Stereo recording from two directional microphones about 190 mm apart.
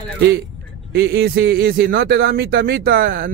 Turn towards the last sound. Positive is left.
turn(degrees=-50)  # may be behind; listen again after turning